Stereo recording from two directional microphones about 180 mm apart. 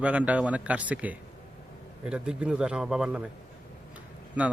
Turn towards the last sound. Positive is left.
turn(degrees=-5)  # may be behind; listen again after turning